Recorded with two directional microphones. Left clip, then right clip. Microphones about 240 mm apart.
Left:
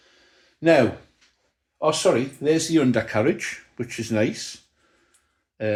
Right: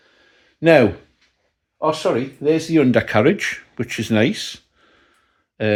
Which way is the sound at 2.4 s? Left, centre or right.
Right.